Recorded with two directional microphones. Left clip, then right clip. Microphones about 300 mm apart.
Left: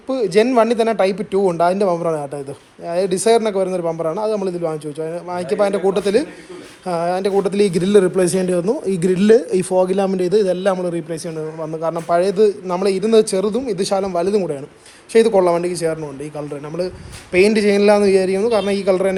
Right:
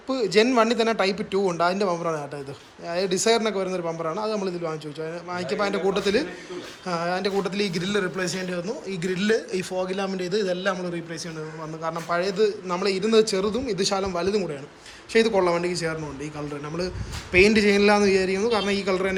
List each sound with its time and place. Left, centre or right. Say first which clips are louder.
0.1 s a man's voice: left 5 dB; centre